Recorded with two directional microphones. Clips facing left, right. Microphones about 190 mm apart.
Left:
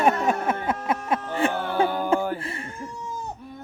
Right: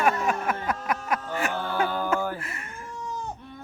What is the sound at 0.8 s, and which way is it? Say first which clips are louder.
Music: left 3 dB; 25° left (ahead or behind).